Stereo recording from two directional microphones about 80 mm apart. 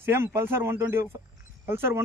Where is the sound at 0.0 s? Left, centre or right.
Right.